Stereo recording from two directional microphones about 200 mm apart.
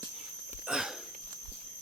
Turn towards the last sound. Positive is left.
turn(degrees=-5)  # may be behind; listen again after turning